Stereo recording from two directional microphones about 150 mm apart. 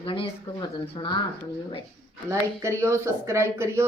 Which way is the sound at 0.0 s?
35° left (ahead or behind).